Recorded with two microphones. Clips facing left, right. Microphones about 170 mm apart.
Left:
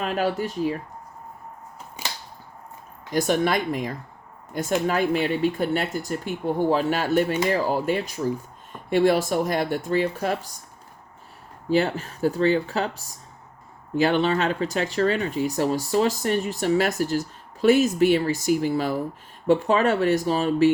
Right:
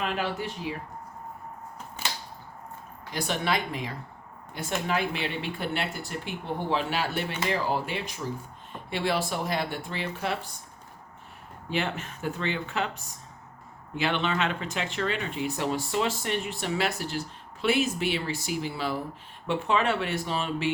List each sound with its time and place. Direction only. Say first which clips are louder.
0.0 s speech: left 5 dB; 40° left (ahead or behind)
3.1 s speech: left 7 dB; 45° left (ahead or behind)
11.7 s speech: left 8 dB; 35° left (ahead or behind)